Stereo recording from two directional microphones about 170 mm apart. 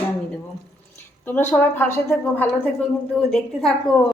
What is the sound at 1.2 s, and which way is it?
A woman's voice, 10° left (ahead or behind).